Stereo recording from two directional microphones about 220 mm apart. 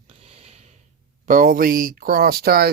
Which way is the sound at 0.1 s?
25° right (ahead or behind).